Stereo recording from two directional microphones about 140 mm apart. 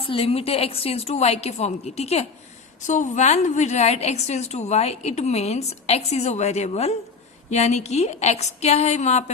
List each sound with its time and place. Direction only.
0.0 s a woman's voice: 40° left (ahead or behind)
2.8 s a woman's voice: 60° left (ahead or behind)